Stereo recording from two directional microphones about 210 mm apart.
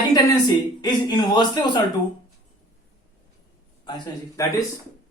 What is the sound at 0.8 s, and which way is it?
Speech, 20° left (ahead or behind).